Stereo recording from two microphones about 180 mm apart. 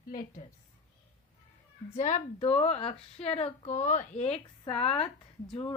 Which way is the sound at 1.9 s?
40° left (ahead or behind).